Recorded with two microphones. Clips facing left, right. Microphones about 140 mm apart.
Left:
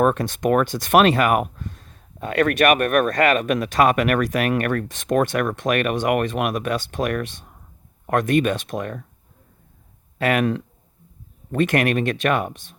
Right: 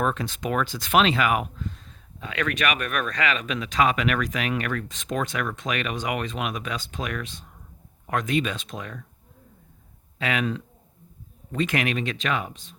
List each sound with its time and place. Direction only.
0.0 s speech: 50° left (ahead or behind)
10.2 s speech: 55° left (ahead or behind)